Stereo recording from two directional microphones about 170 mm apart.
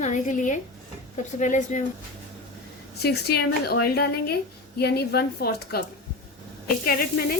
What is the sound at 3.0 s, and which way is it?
A woman's voice, 70° left (ahead or behind).